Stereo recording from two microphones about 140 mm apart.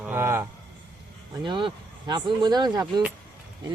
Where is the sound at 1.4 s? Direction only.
35° right (ahead or behind).